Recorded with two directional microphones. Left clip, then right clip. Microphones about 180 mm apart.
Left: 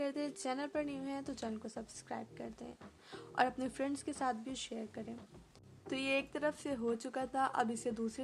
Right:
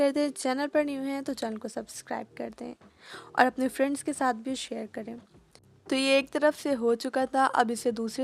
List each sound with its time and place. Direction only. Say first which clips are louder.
0.0 s a woman's voice: right 13 dB; 45° right (ahead or behind)
5.9 s speech: right 12 dB; 55° right (ahead or behind)